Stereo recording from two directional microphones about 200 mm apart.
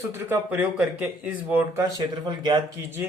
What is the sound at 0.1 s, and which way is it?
Speech, 10° right (ahead or behind).